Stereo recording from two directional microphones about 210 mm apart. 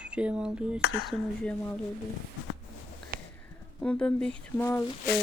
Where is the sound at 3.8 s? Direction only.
5° left (ahead or behind).